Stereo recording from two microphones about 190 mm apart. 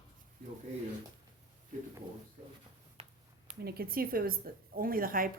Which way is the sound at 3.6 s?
55° right (ahead or behind).